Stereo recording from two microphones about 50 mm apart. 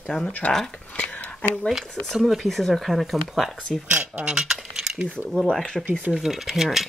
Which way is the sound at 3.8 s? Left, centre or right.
Right.